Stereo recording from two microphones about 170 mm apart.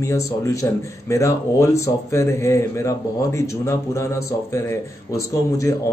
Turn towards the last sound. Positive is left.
turn(degrees=20)  # may be behind; listen again after turning